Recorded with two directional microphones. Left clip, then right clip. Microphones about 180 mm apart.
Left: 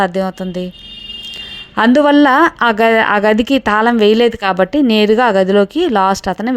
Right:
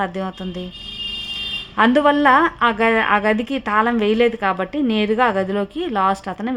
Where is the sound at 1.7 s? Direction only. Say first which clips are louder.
Left 5 dB; 35° left (ahead or behind).